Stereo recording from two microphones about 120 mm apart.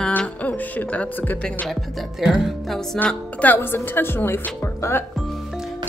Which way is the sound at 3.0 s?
10° left (ahead or behind).